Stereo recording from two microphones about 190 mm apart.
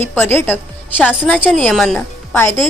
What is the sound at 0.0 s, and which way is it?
A woman's voice, 10° left (ahead or behind).